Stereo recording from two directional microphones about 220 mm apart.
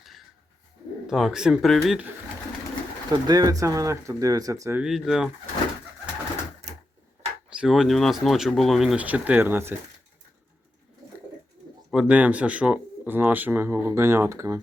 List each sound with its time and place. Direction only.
0.0 s dog: centre (ahead or behind)
1.0 s speech: centre (ahead or behind)
3.1 s speech: 20° right (ahead or behind)
4.8 s speech: centre (ahead or behind)
7.5 s speech: 5° right (ahead or behind)
11.9 s speech: 5° right (ahead or behind)